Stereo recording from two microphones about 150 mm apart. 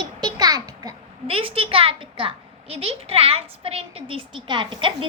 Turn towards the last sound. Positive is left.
turn(degrees=-35)  # may be behind; listen again after turning